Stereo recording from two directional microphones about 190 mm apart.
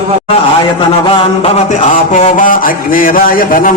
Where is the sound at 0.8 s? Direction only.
30° left (ahead or behind).